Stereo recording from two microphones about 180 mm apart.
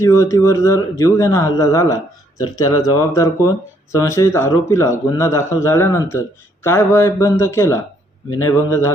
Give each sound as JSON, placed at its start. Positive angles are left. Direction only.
{"t": 0.0, "sound": "speech", "side_deg": 15}